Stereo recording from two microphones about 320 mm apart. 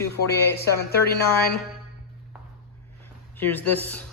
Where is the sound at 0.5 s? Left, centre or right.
Left.